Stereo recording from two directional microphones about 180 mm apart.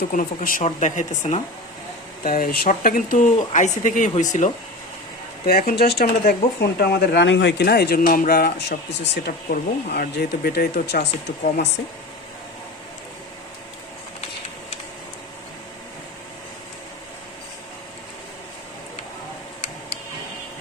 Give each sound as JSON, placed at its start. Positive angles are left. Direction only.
{"t": 0.1, "sound": "speech", "side_deg": 45}
{"t": 2.2, "sound": "speech", "side_deg": 50}
{"t": 5.5, "sound": "speech", "side_deg": 55}